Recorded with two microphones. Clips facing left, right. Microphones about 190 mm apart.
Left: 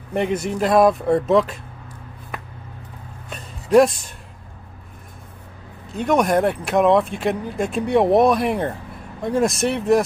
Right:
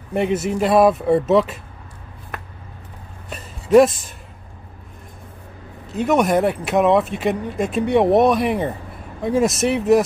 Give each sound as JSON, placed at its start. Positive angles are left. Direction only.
{"t": 0.1, "sound": "speech", "side_deg": -5}
{"t": 3.3, "sound": "music", "side_deg": 0}
{"t": 5.9, "sound": "speech", "side_deg": 0}